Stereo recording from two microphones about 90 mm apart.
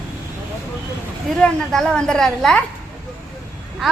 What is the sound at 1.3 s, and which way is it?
A woman's voice, 5° left (ahead or behind).